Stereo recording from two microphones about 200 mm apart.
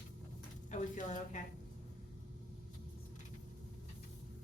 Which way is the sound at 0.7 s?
40° left (ahead or behind).